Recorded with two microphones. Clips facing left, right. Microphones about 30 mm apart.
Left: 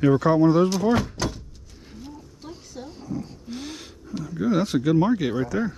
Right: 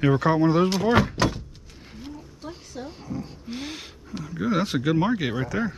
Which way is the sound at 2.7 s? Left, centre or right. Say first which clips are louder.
Left 2 dB; centre.